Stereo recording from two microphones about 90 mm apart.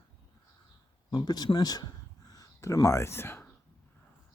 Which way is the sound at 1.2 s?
45° left (ahead or behind).